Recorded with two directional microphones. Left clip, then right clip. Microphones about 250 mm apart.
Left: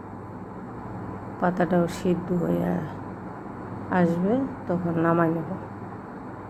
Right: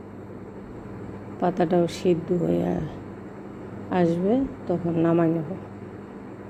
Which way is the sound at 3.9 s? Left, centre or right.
Centre.